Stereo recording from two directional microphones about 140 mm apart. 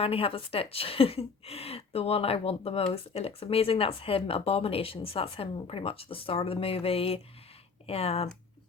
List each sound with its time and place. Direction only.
0.0 s a woman's voice: 40° left (ahead or behind)